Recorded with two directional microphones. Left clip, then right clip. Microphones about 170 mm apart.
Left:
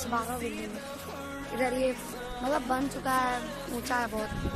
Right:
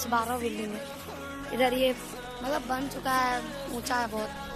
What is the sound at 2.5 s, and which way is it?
Speech, 15° left (ahead or behind).